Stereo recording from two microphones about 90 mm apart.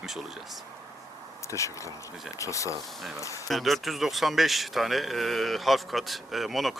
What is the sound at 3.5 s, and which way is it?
Speech, centre (ahead or behind).